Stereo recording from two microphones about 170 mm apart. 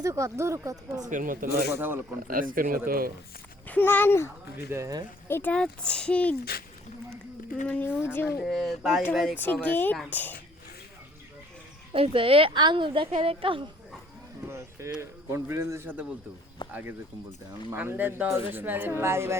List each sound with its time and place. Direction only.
0.0 s speech: 20° right (ahead or behind)
1.1 s speech: 55° right (ahead or behind)
1.7 s speech: 10° right (ahead or behind)
2.2 s speech: 55° right (ahead or behind)
3.7 s speech: 10° left (ahead or behind)
4.5 s speech: 15° right (ahead or behind)
5.3 s speech: 10° left (ahead or behind)
7.7 s speech: 10° left (ahead or behind)
8.4 s speech: centre (ahead or behind)
9.4 s speech: 10° left (ahead or behind)
11.9 s a woman's voice: 35° right (ahead or behind)
14.4 s a sound: 15° right (ahead or behind)
15.3 s speech: 15° right (ahead or behind)